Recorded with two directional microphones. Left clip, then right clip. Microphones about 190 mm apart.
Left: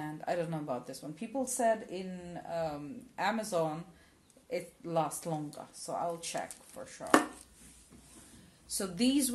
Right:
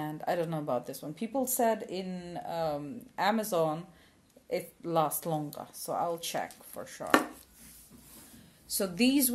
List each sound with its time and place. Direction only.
0.0 s speech: 35° right (ahead or behind)
8.6 s speech: 35° right (ahead or behind)